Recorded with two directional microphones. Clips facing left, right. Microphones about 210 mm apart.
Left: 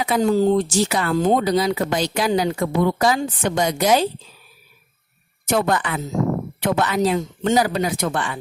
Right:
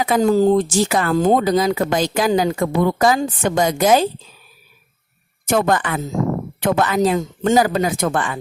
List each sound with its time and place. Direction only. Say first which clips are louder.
0.1 s a woman's voice: right 3 dB; 45° right (ahead or behind)
5.5 s a woman's voice: right 2 dB; 50° right (ahead or behind)